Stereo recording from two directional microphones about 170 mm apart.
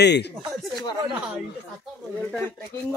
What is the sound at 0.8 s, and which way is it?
Speech, 5° right (ahead or behind).